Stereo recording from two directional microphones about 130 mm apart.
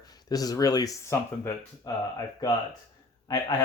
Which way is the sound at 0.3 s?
30° left (ahead or behind).